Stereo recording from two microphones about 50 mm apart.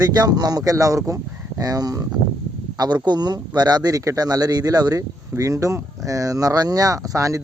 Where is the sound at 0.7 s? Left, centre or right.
Right.